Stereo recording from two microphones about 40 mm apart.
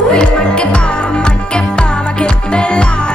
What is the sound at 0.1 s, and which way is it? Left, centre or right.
Music, left.